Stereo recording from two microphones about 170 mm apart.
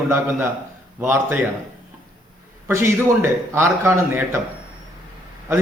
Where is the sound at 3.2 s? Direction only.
15° right (ahead or behind).